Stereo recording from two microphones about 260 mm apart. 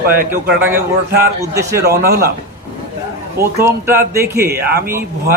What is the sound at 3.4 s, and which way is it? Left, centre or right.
A man's voice, centre.